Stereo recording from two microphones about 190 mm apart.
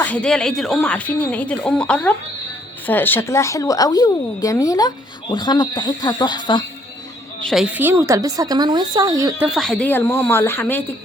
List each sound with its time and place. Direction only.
0.0 s speech: 5° left (ahead or behind); by 6.7 s 25° left (ahead or behind)
7.4 s a woman's voice: centre (ahead or behind); by 9.5 s 20° right (ahead or behind)
9.6 s speech: 5° left (ahead or behind)